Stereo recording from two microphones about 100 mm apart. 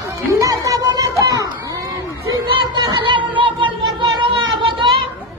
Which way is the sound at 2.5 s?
50° right (ahead or behind).